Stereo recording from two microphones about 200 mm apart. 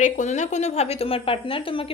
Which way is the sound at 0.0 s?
35° left (ahead or behind).